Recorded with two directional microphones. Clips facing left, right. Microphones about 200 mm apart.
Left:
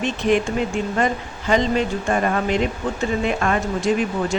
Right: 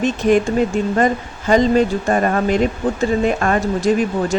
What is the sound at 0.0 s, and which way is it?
Speech, 45° right (ahead or behind).